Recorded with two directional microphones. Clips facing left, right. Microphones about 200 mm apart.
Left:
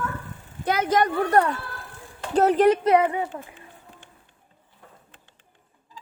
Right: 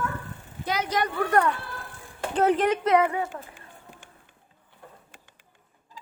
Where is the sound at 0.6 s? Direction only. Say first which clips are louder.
Left 5 dB; 50° left (ahead or behind).